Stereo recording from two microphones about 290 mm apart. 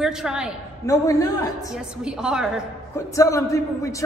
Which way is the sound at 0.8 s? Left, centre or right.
Centre.